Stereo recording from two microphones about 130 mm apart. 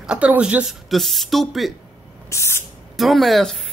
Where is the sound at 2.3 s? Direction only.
20° left (ahead or behind).